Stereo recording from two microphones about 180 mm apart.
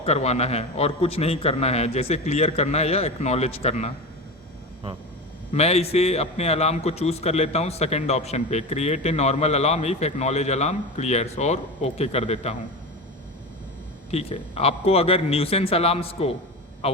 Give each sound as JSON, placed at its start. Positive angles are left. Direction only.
{"t": 0.0, "sound": "a man's voice", "side_deg": 35}
{"t": 5.5, "sound": "a man's voice", "side_deg": 35}
{"t": 14.1, "sound": "a man's voice", "side_deg": 35}